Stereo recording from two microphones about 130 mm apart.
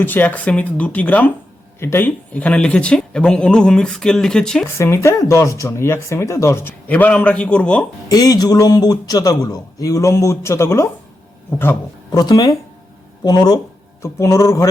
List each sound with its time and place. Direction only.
0.0 s speech: 15° left (ahead or behind)
4.8 s speech: 20° left (ahead or behind)
8.1 s a man's voice: 30° left (ahead or behind)
12.2 s speech: 30° left (ahead or behind)